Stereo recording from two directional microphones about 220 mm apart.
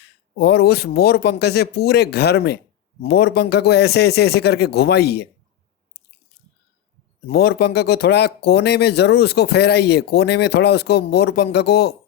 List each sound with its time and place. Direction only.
0.3 s speech: 45° left (ahead or behind)
7.3 s speech: 45° left (ahead or behind)